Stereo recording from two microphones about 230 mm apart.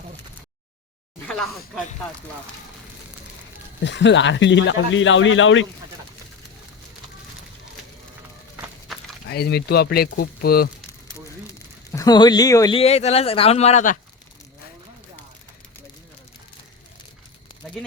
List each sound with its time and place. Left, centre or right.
1.3 s speech: centre
3.8 s a man's voice: left
8.9 s a sound: centre
9.3 s a man's voice: left
11.9 s speech: centre; by 14.0 s left